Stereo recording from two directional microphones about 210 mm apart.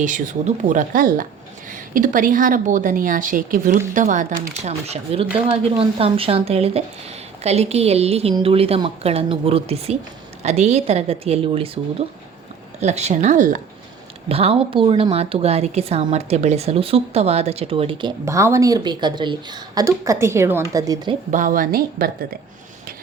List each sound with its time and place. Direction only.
0.0 s a woman's voice: 35° right (ahead or behind); by 21.2 s 20° right (ahead or behind)
21.2 s a woman's voice: 40° right (ahead or behind)